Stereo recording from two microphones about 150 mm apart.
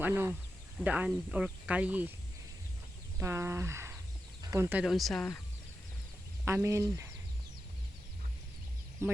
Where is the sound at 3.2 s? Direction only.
15° right (ahead or behind).